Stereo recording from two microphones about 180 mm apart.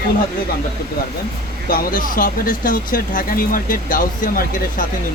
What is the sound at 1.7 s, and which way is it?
Speech, 50° left (ahead or behind).